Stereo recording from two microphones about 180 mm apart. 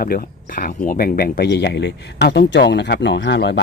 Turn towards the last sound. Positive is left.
turn(degrees=70)  # may be behind; listen again after turning